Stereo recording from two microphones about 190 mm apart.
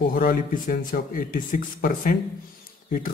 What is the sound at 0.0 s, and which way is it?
A man's voice, 50° left (ahead or behind).